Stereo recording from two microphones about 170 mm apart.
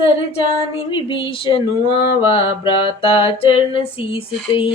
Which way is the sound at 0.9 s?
30° left (ahead or behind).